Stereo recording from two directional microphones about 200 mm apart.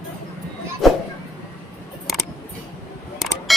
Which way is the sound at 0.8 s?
Centre (ahead or behind).